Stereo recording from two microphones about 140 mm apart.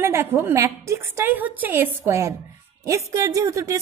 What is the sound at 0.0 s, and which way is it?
A woman's voice, 15° right (ahead or behind).